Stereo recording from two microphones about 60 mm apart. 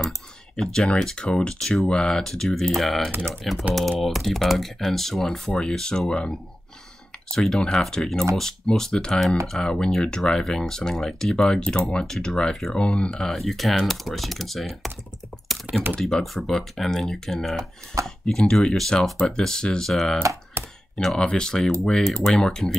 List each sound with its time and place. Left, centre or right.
0.6 s speech: centre
13.3 s speech: centre
15.3 s typing: centre
16.0 s speech: centre
20.6 s a sound: right
20.9 s speech: centre